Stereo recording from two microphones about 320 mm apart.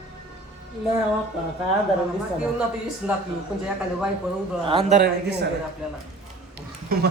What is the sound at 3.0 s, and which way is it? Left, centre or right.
Speech, centre.